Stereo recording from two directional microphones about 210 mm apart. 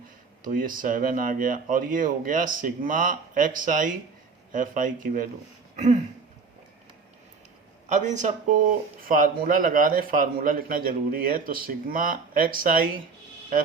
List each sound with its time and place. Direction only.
0.4 s speech: 40° right (ahead or behind)
5.7 s throat clearing: 35° right (ahead or behind)
7.9 s speech: 35° right (ahead or behind)